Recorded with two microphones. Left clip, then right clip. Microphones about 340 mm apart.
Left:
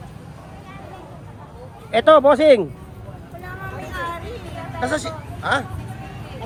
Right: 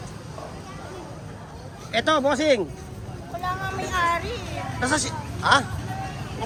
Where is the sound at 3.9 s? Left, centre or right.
Centre.